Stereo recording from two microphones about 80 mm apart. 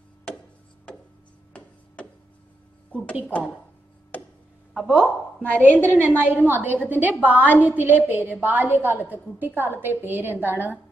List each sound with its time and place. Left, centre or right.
4.1 s a sound: left
5.0 s a woman's voice: centre
5.9 s a woman's voice: right